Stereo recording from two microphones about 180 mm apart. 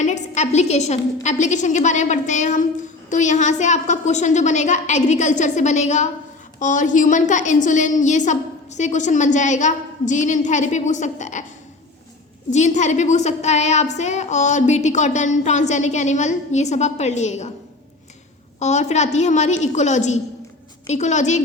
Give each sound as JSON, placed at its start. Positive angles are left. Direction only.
{"t": 0.0, "sound": "a woman's voice", "side_deg": 40}
{"t": 12.5, "sound": "a woman's voice", "side_deg": 40}
{"t": 18.6, "sound": "a woman's voice", "side_deg": 40}